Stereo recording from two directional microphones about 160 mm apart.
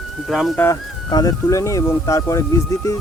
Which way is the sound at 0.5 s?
15° left (ahead or behind).